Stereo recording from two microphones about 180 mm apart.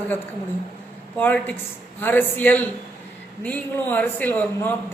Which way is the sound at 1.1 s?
10° left (ahead or behind).